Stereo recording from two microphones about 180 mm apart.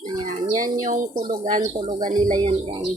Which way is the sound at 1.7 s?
25° right (ahead or behind).